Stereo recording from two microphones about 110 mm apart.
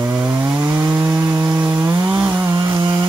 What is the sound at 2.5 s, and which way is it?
Chainsaw, 40° right (ahead or behind).